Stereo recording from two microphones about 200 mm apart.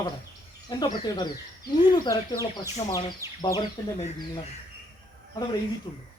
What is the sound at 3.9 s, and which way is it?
Speech, 35° left (ahead or behind).